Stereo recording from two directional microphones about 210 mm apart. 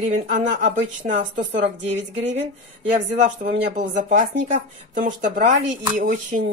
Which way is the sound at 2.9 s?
35° right (ahead or behind).